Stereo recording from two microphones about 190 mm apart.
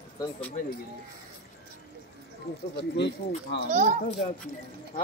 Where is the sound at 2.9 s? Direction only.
65° left (ahead or behind).